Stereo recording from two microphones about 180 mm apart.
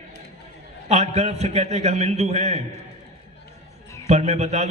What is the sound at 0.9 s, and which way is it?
A man's voice, 40° right (ahead or behind).